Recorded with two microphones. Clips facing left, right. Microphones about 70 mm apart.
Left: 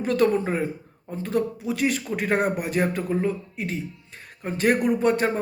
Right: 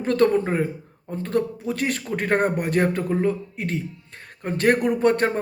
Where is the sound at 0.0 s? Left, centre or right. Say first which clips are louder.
Right 2 dB; right.